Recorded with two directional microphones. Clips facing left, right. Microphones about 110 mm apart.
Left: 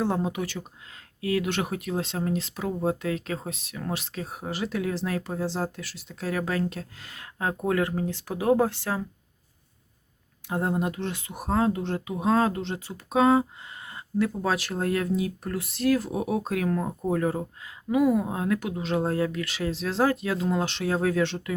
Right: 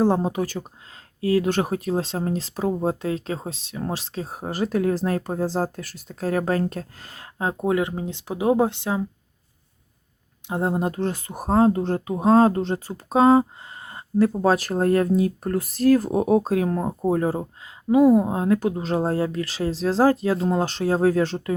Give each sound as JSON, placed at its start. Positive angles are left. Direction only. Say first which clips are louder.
{"t": 0.0, "sound": "speech", "louder": "right 6 dB", "side_deg": -35}
{"t": 10.5, "sound": "speech", "louder": "right 3 dB", "side_deg": -25}